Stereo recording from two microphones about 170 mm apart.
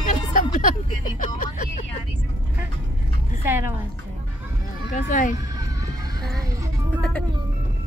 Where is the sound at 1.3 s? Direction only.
50° left (ahead or behind).